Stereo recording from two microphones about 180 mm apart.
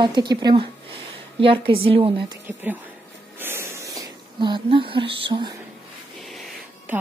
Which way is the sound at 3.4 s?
15° right (ahead or behind).